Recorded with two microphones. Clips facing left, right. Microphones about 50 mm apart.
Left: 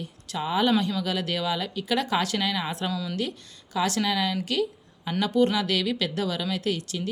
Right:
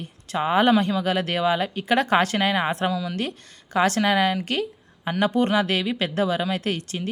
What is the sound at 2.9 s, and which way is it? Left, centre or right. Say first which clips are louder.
Speech: right 4 dB; centre.